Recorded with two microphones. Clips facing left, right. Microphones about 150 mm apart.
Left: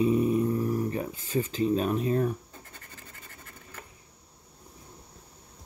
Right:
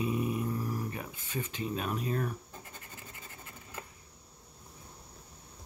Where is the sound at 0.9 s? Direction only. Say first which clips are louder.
Left 9 dB; 30° left (ahead or behind).